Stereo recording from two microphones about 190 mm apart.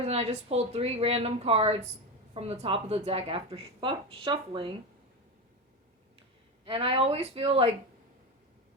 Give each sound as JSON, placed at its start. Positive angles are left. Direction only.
{"t": 0.0, "sound": "speech", "side_deg": -35}
{"t": 6.7, "sound": "speech", "side_deg": -30}